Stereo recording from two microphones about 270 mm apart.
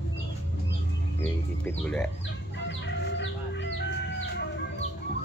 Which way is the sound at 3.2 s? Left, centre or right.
Left.